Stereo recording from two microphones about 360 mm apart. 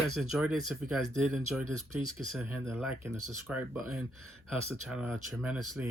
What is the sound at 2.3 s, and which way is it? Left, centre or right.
Speech, centre.